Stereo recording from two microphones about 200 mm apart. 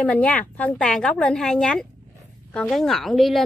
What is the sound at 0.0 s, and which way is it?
A woman's voice, 5° left (ahead or behind).